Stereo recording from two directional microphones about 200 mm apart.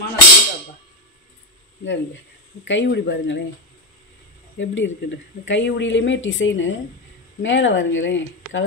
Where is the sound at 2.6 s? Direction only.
60° left (ahead or behind).